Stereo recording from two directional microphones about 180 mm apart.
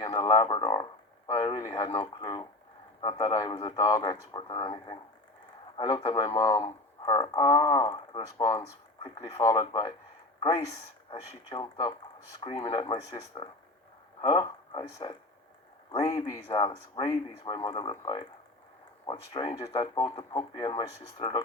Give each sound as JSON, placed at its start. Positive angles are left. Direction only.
{"t": 0.0, "sound": "a man's voice", "side_deg": 25}
{"t": 11.1, "sound": "speech", "side_deg": 25}